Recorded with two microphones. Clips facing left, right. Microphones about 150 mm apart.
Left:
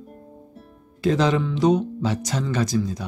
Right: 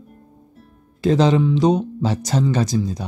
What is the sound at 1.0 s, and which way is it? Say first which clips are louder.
Speech: right 4 dB; 25° right (ahead or behind).